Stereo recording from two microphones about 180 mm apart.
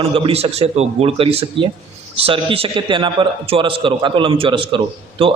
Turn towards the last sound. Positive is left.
turn(degrees=-30)  # may be behind; listen again after turning